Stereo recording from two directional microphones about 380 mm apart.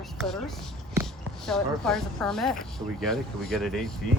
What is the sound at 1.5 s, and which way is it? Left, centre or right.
Speech, centre.